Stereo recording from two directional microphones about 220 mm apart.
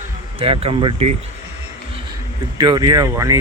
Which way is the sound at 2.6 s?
20° right (ahead or behind).